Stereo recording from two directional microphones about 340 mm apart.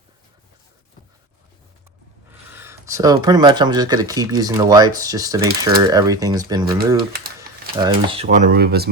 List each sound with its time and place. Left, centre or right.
2.5 s speech: centre
5.4 s speech: right
5.9 s speech: centre; by 8.9 s right